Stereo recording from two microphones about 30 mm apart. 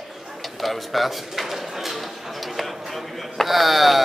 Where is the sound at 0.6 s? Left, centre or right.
Centre.